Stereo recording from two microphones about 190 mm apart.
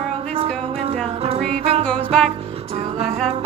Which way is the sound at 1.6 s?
35° right (ahead or behind).